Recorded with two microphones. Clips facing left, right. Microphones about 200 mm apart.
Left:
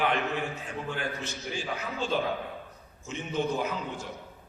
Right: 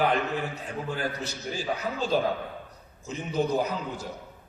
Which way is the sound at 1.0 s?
35° right (ahead or behind).